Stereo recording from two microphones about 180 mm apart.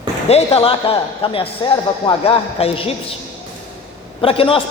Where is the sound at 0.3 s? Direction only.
35° left (ahead or behind).